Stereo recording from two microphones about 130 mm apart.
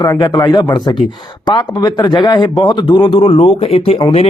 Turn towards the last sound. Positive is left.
turn(degrees=55)  # may be behind; listen again after turning